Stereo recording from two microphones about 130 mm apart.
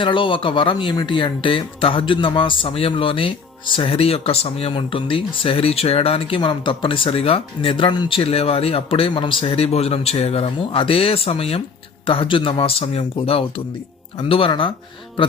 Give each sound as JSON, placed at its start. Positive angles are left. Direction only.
{"t": 0.0, "sound": "speech", "side_deg": 40}